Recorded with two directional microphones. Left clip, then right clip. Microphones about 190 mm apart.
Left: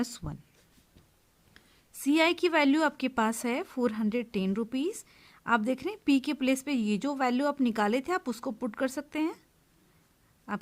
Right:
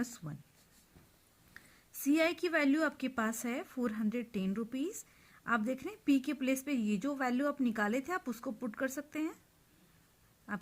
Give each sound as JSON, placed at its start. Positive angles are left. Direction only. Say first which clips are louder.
{"t": 0.0, "sound": "a woman's voice", "louder": "left 6 dB", "side_deg": 35}
{"t": 2.0, "sound": "a woman's voice", "louder": "left 6 dB", "side_deg": 30}